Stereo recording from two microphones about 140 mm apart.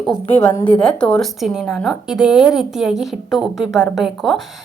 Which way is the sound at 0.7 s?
5° left (ahead or behind).